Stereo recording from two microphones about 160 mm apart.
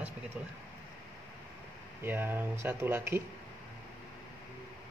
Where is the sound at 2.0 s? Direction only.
15° right (ahead or behind).